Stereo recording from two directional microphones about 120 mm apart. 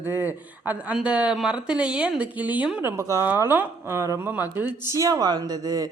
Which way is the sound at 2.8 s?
25° right (ahead or behind).